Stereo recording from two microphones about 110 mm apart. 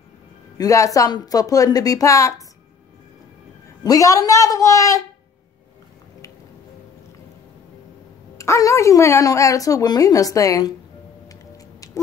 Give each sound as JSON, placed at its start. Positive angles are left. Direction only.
{"t": 0.6, "sound": "a woman's voice", "side_deg": 30}
{"t": 3.8, "sound": "a woman's voice", "side_deg": 30}
{"t": 8.4, "sound": "a woman's voice", "side_deg": 30}
{"t": 11.2, "sound": "music", "side_deg": 30}